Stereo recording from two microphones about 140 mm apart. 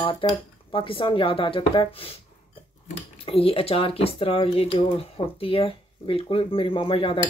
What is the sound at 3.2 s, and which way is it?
Speech, 40° left (ahead or behind).